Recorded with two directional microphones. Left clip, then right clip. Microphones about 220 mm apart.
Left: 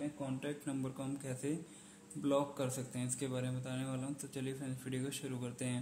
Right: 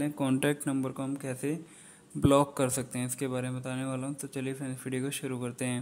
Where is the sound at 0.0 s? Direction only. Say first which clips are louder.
Right 12 dB; 50° right (ahead or behind).